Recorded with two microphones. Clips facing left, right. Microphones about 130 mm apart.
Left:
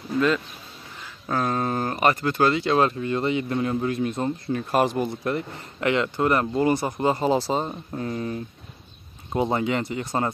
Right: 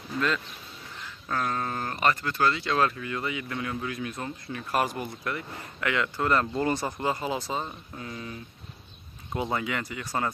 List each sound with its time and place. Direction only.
1.3 s a man's voice: 20° left (ahead or behind)
7.0 s speech: 25° left (ahead or behind)
9.3 s a man's voice: 30° left (ahead or behind)